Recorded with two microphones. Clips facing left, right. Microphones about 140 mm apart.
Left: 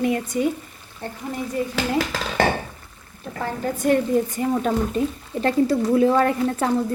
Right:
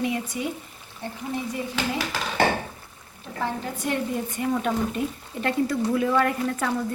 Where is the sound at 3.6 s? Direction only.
45° left (ahead or behind).